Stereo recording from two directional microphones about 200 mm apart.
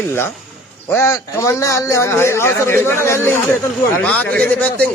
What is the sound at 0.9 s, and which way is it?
A man's voice, 15° left (ahead or behind).